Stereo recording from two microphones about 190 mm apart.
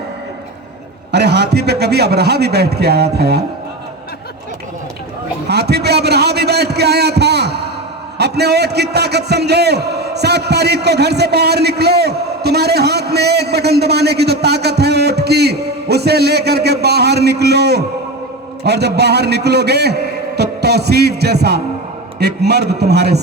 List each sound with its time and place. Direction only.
1.1 s a man's voice: 60° right (ahead or behind)
5.5 s a sound: 60° right (ahead or behind)
8.2 s a man's voice: 60° right (ahead or behind)